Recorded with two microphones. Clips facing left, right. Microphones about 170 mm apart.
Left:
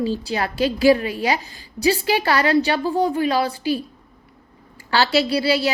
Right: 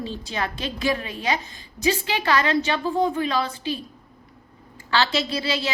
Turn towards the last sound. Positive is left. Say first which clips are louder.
# left 7 dB
turn(degrees=35)  # may be behind; listen again after turning